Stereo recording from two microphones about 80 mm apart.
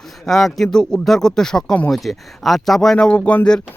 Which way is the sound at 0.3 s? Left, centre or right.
Centre.